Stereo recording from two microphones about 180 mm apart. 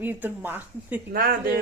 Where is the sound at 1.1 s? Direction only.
55° right (ahead or behind).